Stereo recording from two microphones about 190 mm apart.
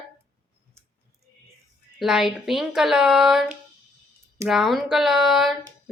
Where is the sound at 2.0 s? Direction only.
Centre (ahead or behind).